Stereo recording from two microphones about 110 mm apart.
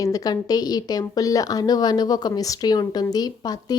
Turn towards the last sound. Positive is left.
turn(degrees=35)  # may be behind; listen again after turning